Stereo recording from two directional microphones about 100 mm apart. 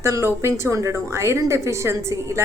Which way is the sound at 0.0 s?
25° right (ahead or behind).